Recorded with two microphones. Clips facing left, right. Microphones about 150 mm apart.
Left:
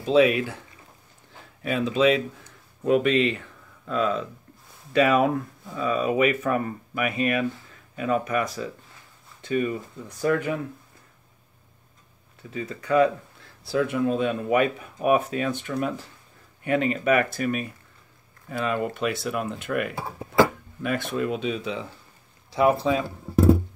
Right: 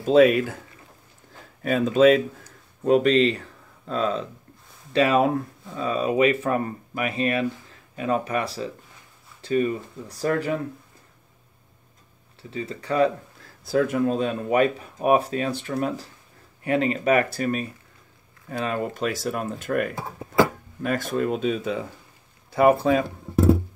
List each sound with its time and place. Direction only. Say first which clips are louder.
0.0 s speech: right 3 dB; 50° right (ahead or behind)
1.6 s speech: right 4 dB; 45° right (ahead or behind)
12.4 s speech: right 1 dB; 30° right (ahead or behind); by 23.0 s 55° right (ahead or behind)